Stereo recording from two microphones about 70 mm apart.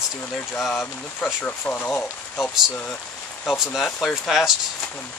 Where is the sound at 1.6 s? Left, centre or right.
Left.